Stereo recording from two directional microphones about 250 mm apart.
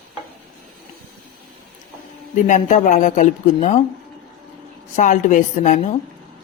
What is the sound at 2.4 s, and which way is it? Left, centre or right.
Speech, left.